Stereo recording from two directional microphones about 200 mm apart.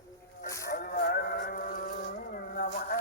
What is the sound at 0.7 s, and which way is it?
Motorboat, 50° left (ahead or behind).